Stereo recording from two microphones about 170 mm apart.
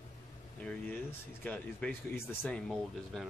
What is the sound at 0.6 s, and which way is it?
Speech, 10° left (ahead or behind).